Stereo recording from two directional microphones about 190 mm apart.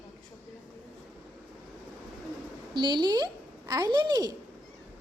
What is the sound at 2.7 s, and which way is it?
A woman's voice, 25° right (ahead or behind).